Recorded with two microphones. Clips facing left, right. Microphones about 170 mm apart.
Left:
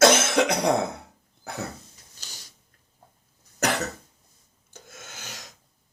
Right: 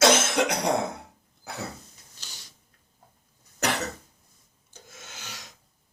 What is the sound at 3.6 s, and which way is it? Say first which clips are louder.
Cough: left 2 dB; 45° left (ahead or behind).